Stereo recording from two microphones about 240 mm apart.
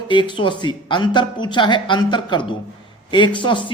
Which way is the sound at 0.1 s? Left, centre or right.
Centre.